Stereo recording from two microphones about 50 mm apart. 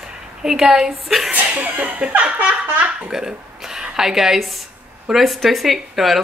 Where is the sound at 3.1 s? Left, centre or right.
Centre.